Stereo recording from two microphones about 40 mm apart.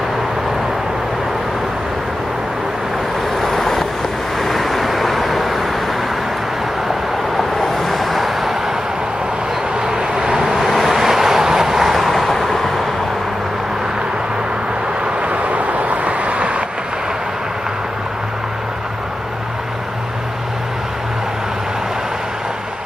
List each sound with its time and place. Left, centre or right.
3.3 s vehicle: centre
7.3 s vehicle: centre
9.8 s vehicle: centre
10.6 s vehicle: centre
11.1 s vehicle: centre
15.2 s vehicle: right